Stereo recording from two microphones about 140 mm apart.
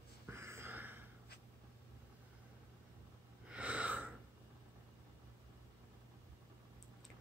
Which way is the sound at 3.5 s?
10° right (ahead or behind).